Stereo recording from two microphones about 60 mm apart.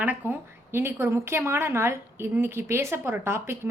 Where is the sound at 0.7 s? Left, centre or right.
Right.